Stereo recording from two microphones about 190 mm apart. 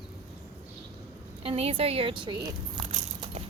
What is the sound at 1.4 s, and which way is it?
Speech, 30° right (ahead or behind).